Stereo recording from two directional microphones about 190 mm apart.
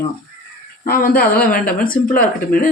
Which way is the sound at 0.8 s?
50° left (ahead or behind).